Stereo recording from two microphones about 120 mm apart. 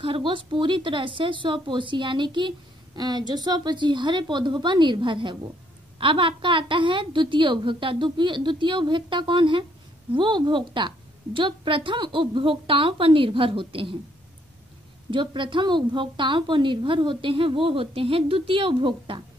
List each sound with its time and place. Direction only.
0.0 s a woman's voice: 45° right (ahead or behind)
15.0 s a woman's voice: 40° right (ahead or behind)